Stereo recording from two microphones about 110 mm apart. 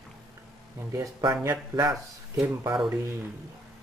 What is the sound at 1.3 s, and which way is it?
Speech, 25° right (ahead or behind).